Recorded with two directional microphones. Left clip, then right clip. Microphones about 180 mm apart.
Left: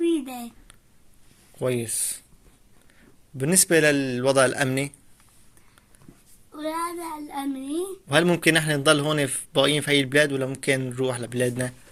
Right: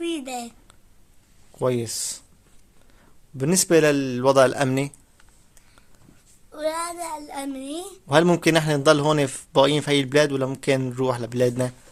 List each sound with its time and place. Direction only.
0.0 s a sound: 15° right (ahead or behind)
1.5 s a man's voice: 35° right (ahead or behind)
3.4 s a man's voice: 35° right (ahead or behind)
6.6 s child singing: 60° right (ahead or behind)
8.0 s a man's voice: 35° right (ahead or behind)